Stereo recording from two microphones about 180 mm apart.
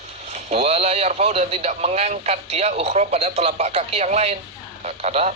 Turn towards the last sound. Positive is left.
turn(degrees=-35)  # may be behind; listen again after turning